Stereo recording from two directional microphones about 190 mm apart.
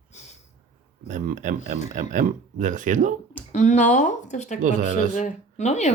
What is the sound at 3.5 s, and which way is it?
Speech, 40° left (ahead or behind).